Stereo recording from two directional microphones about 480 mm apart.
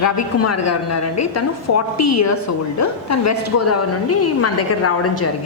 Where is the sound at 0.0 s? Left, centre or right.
Left.